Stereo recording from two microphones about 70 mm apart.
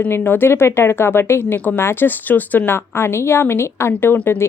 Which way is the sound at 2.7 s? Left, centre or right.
Left.